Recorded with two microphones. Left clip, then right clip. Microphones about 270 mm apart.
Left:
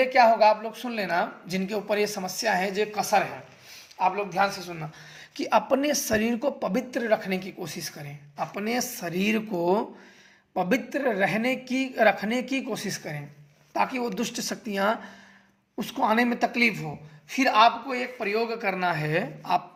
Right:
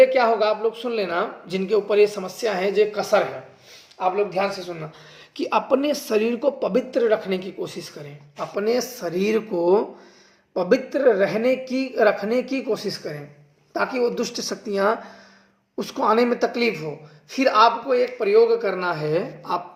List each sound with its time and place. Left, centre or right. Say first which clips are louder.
0.0 s speech: right 2 dB; left
16.0 s speech: right 4 dB; left
17.4 s a man's voice: right 3 dB; left
17.8 s speech: right 9 dB; left